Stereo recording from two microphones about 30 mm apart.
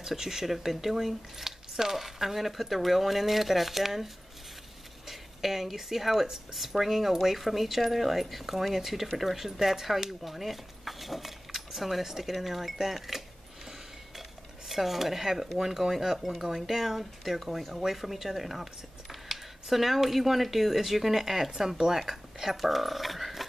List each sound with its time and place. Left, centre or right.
0.0 s speech: centre
14.7 s speech: centre